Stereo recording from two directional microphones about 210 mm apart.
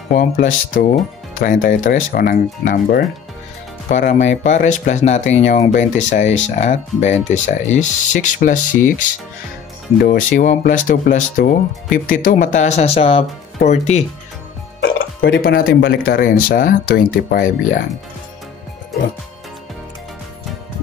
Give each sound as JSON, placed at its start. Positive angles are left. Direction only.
{"t": 0.1, "sound": "speech", "side_deg": 40}
{"t": 10.0, "sound": "speech", "side_deg": 40}
{"t": 15.0, "sound": "speech", "side_deg": 45}